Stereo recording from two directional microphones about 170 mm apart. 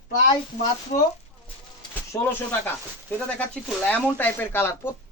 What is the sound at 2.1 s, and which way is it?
Speech, 15° left (ahead or behind).